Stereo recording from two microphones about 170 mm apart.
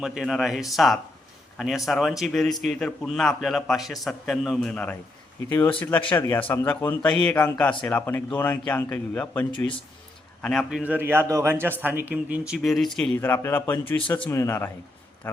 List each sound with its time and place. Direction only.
0.0 s a man's voice: centre (ahead or behind); by 14.7 s 15° left (ahead or behind)